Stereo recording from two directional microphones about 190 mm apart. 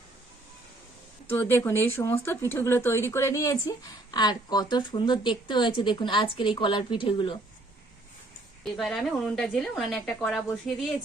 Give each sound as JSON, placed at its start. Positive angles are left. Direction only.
{"t": 1.3, "sound": "speech", "side_deg": 10}
{"t": 8.6, "sound": "a woman's voice", "side_deg": 0}